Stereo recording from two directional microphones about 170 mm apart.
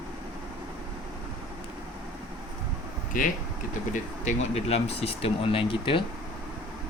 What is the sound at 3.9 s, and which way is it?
Speech, 40° left (ahead or behind).